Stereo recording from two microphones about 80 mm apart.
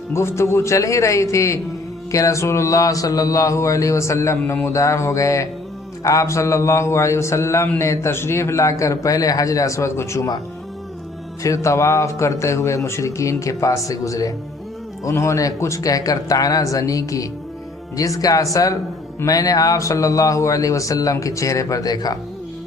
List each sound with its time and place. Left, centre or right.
0.1 s a man's voice: left
11.4 s a man's voice: left